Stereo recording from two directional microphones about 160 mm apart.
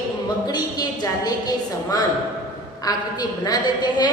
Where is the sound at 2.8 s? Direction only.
25° left (ahead or behind).